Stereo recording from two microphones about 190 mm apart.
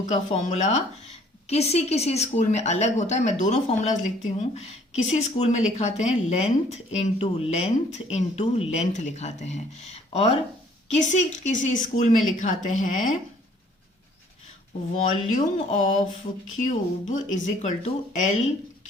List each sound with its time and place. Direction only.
0.1 s a woman's voice: 40° left (ahead or behind)
14.9 s a woman's voice: 40° left (ahead or behind)
16.6 s a woman's voice: 40° left (ahead or behind)